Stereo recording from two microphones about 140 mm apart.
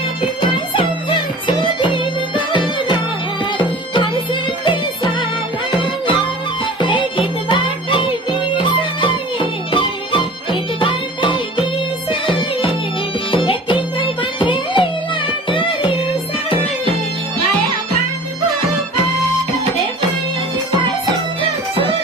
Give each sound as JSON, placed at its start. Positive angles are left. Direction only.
{"t": 1.5, "sound": "music", "side_deg": 35}
{"t": 4.6, "sound": "music", "side_deg": 35}
{"t": 13.3, "sound": "music", "side_deg": 35}